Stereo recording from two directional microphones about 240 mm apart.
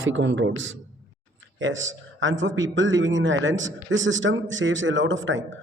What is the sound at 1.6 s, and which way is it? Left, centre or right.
A man's voice, right.